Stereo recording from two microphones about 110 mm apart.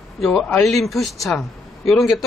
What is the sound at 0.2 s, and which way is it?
Speech, 5° left (ahead or behind).